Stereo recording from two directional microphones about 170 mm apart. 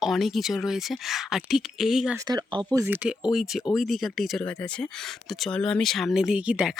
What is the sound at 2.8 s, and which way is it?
Speech, 10° right (ahead or behind).